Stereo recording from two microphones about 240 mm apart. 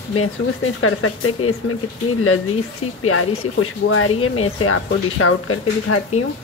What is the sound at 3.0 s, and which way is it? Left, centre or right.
Speech, left.